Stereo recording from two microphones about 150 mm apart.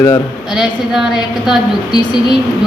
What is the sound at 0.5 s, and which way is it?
A woman's voice, 5° right (ahead or behind).